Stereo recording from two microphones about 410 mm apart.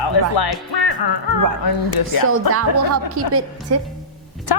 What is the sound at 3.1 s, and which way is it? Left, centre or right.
Speech, right.